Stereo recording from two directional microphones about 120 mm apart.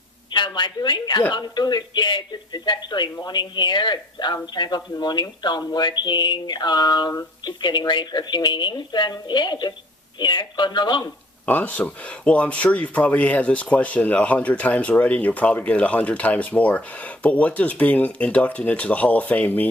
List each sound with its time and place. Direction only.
0.3 s a man's voice: 40° left (ahead or behind)
11.4 s speech: 15° left (ahead or behind)